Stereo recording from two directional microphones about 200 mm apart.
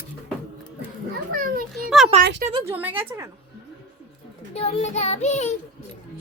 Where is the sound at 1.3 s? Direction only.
45° right (ahead or behind).